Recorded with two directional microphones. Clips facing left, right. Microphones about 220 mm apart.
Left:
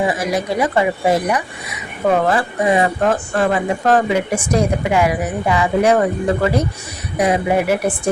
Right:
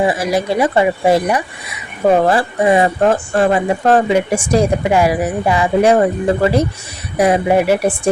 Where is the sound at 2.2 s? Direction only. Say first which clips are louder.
Right 3 dB; 30° right (ahead or behind).